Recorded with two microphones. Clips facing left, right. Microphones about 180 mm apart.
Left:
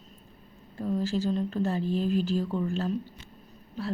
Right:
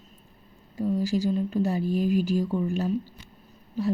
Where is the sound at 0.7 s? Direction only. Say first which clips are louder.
Right 3 dB; 10° right (ahead or behind).